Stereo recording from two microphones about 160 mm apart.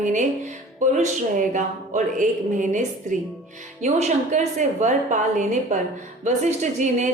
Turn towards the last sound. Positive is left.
turn(degrees=-50)  # may be behind; listen again after turning